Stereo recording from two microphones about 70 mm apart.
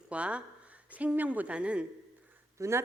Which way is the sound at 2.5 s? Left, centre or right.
Right.